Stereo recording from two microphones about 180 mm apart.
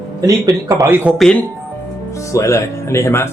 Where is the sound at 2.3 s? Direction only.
15° left (ahead or behind).